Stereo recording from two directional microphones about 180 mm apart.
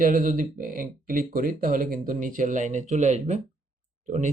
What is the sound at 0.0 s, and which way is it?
Speech, 50° right (ahead or behind).